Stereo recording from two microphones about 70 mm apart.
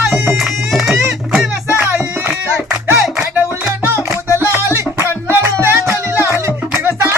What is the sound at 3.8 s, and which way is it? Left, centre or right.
Music, right.